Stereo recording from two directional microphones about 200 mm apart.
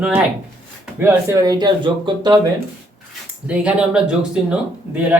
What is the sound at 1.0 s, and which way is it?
Speech, 15° right (ahead or behind).